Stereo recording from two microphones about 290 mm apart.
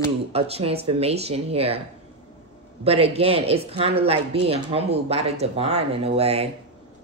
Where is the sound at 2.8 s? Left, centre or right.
Centre.